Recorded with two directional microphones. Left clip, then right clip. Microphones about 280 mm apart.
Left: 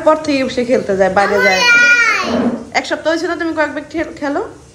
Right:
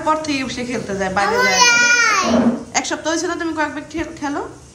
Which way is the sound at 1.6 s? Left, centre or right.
Right.